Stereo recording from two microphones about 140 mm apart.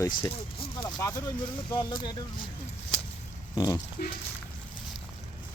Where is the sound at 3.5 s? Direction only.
30° left (ahead or behind).